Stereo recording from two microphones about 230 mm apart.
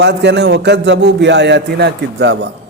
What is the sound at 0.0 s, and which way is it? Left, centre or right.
A man's voice, right.